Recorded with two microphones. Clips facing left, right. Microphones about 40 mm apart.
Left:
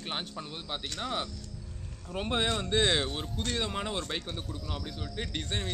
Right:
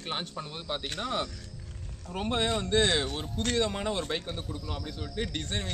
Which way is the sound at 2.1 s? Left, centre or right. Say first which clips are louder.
Right 1 dB; centre.